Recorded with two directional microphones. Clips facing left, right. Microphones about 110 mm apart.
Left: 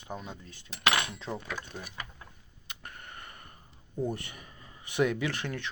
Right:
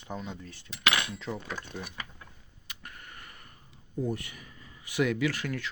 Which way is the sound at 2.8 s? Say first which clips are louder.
Left 2 dB; 25° left (ahead or behind).